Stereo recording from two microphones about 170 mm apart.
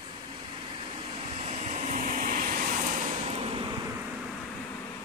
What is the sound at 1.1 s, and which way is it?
Vehicle, 35° right (ahead or behind).